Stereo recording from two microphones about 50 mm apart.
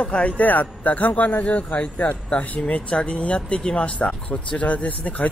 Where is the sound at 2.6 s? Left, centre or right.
Left.